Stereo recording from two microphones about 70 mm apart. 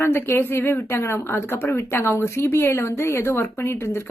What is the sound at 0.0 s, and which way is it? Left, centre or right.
A woman's voice, left.